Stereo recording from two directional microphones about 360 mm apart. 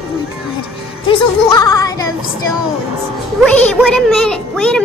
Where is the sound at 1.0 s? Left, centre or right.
Centre.